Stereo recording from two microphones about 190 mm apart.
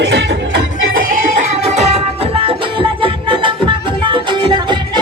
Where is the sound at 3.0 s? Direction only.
25° right (ahead or behind).